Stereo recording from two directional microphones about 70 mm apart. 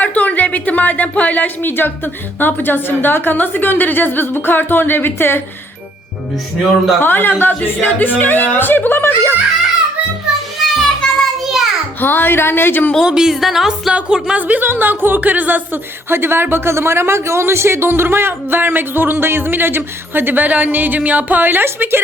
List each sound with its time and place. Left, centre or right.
0.0 s a woman's voice: left
7.0 s a woman's voice: left
10.6 s music: centre
11.9 s a woman's voice: left
13.0 s speech: centre
13.9 s speech: centre
14.4 s a woman's voice: right